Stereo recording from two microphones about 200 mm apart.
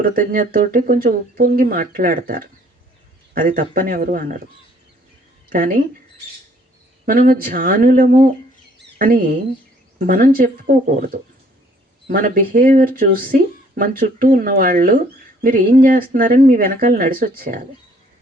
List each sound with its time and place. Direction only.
0.0 s speech: 45° right (ahead or behind)
5.5 s speech: 45° right (ahead or behind)
7.0 s speech: 45° right (ahead or behind)